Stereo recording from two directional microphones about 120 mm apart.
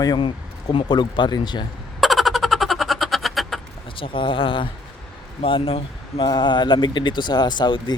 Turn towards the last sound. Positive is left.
turn(degrees=40)  # may be behind; listen again after turning